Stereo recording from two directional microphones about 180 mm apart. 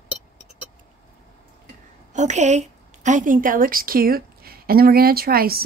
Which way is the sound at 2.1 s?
40° right (ahead or behind).